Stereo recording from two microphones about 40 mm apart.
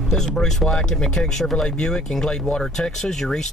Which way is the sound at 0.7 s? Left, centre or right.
Centre.